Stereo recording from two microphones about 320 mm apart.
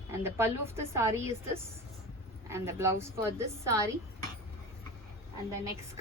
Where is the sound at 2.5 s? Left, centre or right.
Centre.